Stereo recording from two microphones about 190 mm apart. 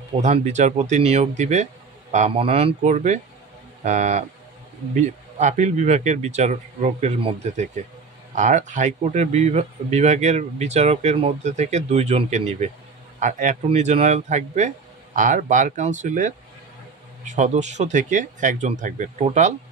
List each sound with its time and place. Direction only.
0.2 s speech: 40° right (ahead or behind)